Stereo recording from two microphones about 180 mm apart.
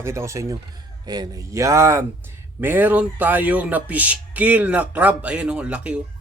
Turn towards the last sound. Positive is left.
turn(degrees=-5)  # may be behind; listen again after turning